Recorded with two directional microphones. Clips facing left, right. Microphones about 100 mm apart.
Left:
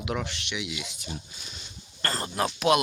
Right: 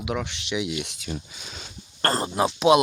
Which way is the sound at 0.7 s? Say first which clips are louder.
Right 6 dB; 70° right (ahead or behind).